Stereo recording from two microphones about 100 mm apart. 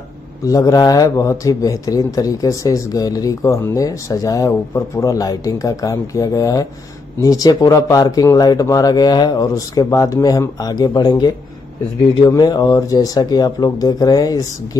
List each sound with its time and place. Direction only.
0.4 s a man's voice: 35° left (ahead or behind)